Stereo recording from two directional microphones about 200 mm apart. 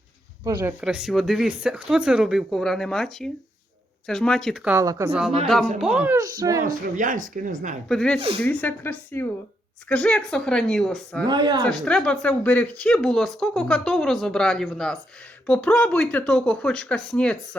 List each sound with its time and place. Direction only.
0.6 s speech: 5° right (ahead or behind)
4.8 s speech: 15° right (ahead or behind)
6.7 s a woman's voice: 40° right (ahead or behind)
7.9 s speech: 5° left (ahead or behind)
11.3 s speech: 25° right (ahead or behind)
11.9 s speech: 5° left (ahead or behind)